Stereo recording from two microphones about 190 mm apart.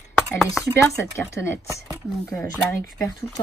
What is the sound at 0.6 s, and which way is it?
A woman's voice, 15° left (ahead or behind).